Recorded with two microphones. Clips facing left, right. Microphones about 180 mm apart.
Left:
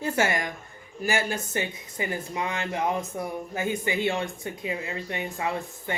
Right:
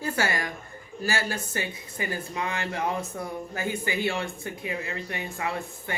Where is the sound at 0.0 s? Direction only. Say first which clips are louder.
Left 2 dB; 20° left (ahead or behind).